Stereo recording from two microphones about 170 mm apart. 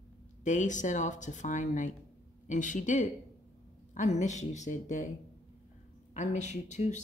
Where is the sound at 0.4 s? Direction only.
45° left (ahead or behind).